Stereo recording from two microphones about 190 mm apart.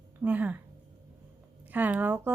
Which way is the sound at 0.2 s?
10° right (ahead or behind).